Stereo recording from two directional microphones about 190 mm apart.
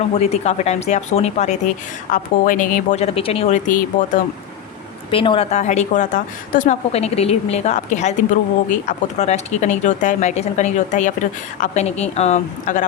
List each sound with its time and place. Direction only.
0.1 s speech: 35° left (ahead or behind)
5.1 s speech: 30° left (ahead or behind)